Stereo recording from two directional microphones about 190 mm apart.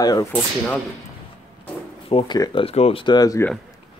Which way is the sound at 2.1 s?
25° left (ahead or behind).